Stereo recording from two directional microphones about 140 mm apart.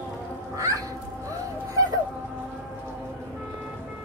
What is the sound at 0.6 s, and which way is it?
Music, 25° right (ahead or behind).